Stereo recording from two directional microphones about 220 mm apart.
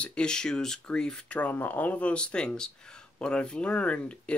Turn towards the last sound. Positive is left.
turn(degrees=5)  # may be behind; listen again after turning